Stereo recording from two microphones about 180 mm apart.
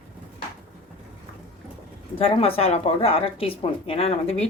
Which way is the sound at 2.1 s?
30° left (ahead or behind).